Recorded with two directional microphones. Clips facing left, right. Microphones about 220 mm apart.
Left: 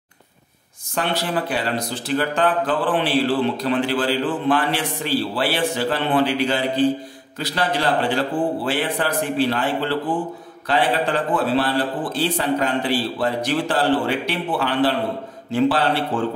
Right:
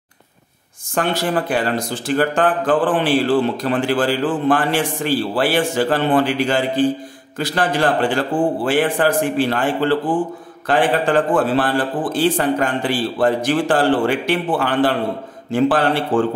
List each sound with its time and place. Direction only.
0.8 s speech: 45° right (ahead or behind)